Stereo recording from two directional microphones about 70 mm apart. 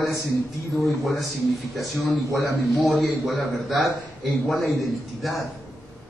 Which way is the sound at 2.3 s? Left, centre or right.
Right.